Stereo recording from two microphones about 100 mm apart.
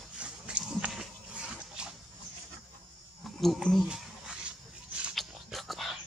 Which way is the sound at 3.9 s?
10° right (ahead or behind).